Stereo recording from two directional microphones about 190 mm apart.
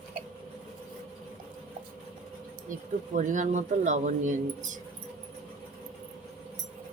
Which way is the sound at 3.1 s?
40° right (ahead or behind).